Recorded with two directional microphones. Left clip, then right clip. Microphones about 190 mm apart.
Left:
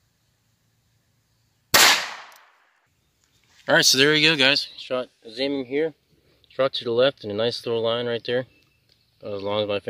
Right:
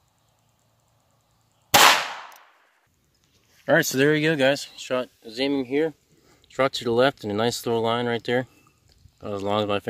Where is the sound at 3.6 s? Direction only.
35° right (ahead or behind).